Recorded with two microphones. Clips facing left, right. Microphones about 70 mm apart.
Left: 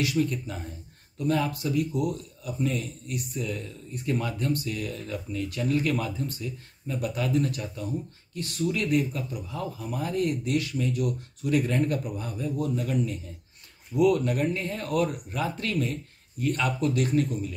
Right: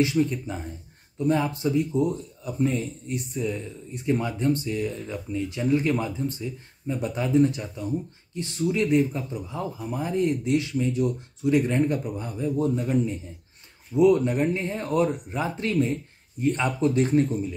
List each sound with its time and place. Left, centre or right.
0.0 s speech: right